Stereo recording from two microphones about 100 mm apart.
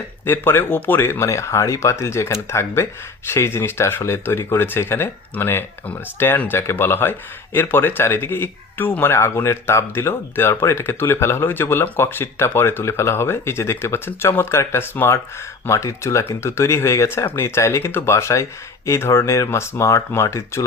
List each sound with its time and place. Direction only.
0.3 s speech: 20° left (ahead or behind)